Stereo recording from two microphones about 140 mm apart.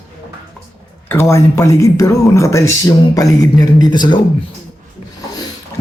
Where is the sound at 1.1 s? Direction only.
20° left (ahead or behind).